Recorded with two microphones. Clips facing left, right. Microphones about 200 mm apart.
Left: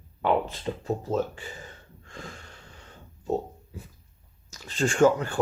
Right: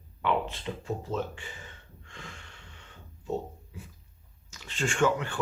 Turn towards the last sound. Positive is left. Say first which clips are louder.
# left 6 dB
turn(degrees=40)  # may be behind; listen again after turning